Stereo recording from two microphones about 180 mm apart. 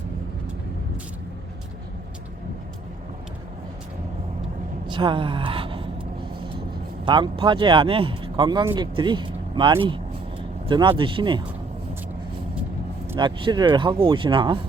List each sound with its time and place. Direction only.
4.9 s a woman's voice: 25° right (ahead or behind)
7.0 s speech: 25° right (ahead or behind)
13.1 s speech: 25° right (ahead or behind)